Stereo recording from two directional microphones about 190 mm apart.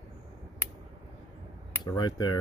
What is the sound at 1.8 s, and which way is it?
Speech, 25° left (ahead or behind).